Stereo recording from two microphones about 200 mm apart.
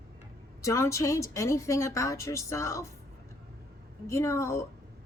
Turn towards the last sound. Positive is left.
turn(degrees=15)  # may be behind; listen again after turning